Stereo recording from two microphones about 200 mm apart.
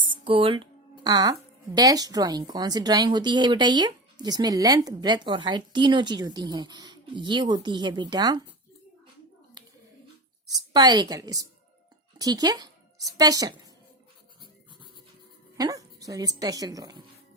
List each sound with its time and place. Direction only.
0.0 s speech: 25° right (ahead or behind)
10.5 s a woman's voice: 20° right (ahead or behind)
15.5 s a woman's voice: 20° right (ahead or behind)